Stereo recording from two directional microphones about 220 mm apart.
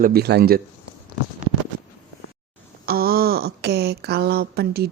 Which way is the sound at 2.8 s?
45° right (ahead or behind).